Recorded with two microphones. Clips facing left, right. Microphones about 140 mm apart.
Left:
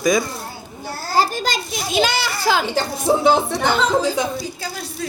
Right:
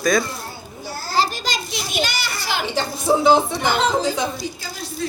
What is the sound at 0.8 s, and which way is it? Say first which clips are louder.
Children playing: left 2 dB; 50° left (ahead or behind).